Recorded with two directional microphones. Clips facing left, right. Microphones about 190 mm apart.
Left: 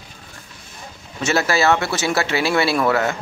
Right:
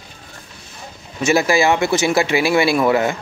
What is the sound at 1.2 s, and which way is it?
Speech, 10° right (ahead or behind).